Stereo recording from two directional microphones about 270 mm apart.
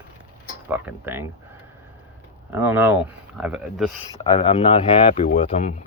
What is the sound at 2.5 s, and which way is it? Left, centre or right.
Speech, centre.